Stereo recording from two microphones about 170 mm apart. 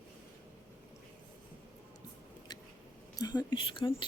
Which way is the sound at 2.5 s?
25° left (ahead or behind).